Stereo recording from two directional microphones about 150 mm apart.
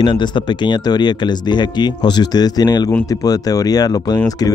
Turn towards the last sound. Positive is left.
turn(degrees=25)  # may be behind; listen again after turning